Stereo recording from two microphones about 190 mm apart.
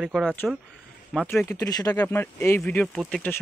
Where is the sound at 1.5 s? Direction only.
15° left (ahead or behind).